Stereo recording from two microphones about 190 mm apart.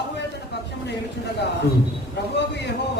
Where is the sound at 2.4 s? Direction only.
65° left (ahead or behind).